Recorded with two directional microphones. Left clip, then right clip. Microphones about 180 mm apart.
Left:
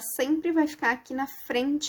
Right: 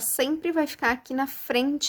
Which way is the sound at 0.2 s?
30° right (ahead or behind).